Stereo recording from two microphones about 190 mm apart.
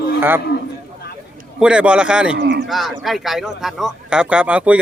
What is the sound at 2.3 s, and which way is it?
Speech, 60° right (ahead or behind).